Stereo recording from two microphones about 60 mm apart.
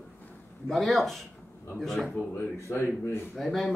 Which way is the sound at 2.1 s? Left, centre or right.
Left.